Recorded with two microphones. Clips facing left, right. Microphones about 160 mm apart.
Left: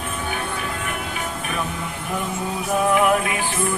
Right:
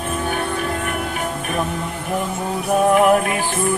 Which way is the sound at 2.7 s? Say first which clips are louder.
Right 4 dB; 45° right (ahead or behind).